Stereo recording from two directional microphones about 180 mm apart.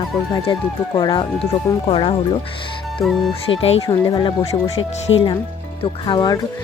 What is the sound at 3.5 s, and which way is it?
Speech, 30° left (ahead or behind).